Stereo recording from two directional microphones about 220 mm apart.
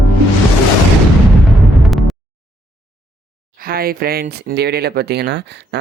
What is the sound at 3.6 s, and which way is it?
Speech, 40° right (ahead or behind).